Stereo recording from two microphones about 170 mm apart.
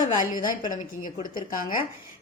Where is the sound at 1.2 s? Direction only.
55° left (ahead or behind).